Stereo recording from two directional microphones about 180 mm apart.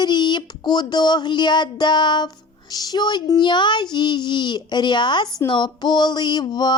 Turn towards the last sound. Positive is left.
turn(degrees=25)  # may be behind; listen again after turning